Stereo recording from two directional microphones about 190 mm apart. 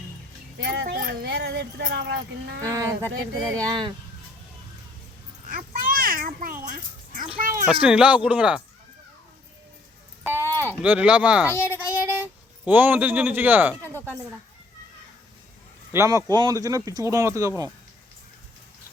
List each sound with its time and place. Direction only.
0.6 s speech: 65° right (ahead or behind)
2.6 s speech: 15° right (ahead or behind)
5.5 s a sound: 45° right (ahead or behind)
7.7 s speech: 5° right (ahead or behind)
10.2 s speech: 15° right (ahead or behind)
11.6 s a sound: 10° right (ahead or behind)
15.9 s speech: 15° right (ahead or behind)